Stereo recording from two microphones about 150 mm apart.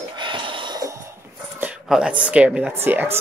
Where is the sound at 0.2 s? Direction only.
35° right (ahead or behind).